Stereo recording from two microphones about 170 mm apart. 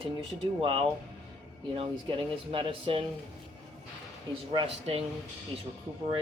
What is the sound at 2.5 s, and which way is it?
Speech, 30° right (ahead or behind).